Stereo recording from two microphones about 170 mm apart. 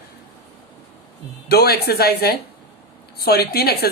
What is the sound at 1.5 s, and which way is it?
A woman's voice, 65° left (ahead or behind).